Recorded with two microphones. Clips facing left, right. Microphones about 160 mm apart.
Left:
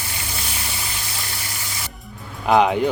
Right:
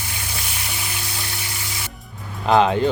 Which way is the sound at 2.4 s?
15° left (ahead or behind).